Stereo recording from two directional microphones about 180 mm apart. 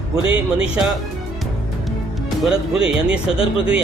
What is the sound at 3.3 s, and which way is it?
Speech, 30° left (ahead or behind).